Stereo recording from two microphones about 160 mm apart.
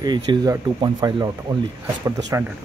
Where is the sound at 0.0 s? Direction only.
25° right (ahead or behind).